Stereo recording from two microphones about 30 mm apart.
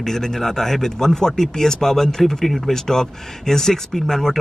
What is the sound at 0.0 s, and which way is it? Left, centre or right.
Speech, centre.